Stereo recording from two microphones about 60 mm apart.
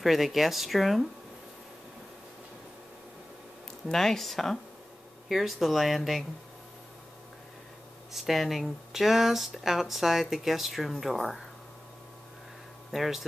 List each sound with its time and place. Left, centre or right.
0.0 s speech: centre
3.8 s speech: centre
8.1 s speech: centre
12.9 s speech: centre